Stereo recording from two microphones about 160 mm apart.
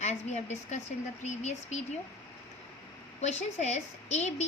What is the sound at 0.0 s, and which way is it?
Speech, 45° left (ahead or behind).